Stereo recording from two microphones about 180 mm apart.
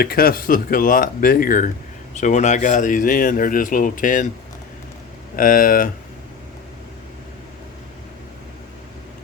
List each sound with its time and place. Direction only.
0.0 s speech: 55° left (ahead or behind)
5.4 s speech: 50° left (ahead or behind)